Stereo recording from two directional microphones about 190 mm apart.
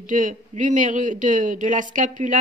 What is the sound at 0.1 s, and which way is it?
Speech, 45° right (ahead or behind).